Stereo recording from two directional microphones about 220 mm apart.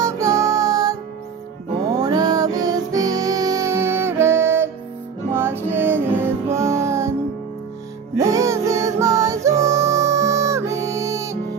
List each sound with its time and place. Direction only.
0.0 s music: 15° right (ahead or behind)
8.2 s music: 15° right (ahead or behind)